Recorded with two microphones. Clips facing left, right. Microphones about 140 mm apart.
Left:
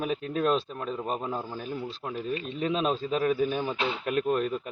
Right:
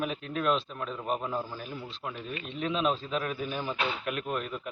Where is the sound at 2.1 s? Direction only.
35° left (ahead or behind).